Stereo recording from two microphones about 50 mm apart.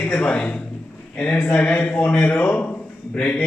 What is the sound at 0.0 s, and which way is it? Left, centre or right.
A man's voice, left.